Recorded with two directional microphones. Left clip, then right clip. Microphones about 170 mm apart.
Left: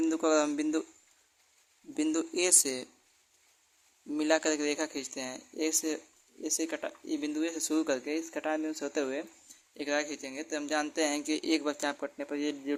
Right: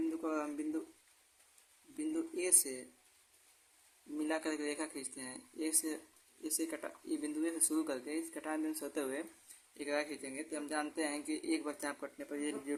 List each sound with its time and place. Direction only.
0.2 s a man's voice: 65° left (ahead or behind)
2.0 s a man's voice: 60° left (ahead or behind)
4.2 s speech: 55° left (ahead or behind); by 9.2 s 40° left (ahead or behind)
9.7 s speech: 50° left (ahead or behind)